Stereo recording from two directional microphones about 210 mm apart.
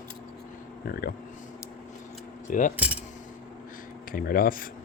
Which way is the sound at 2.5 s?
40° left (ahead or behind).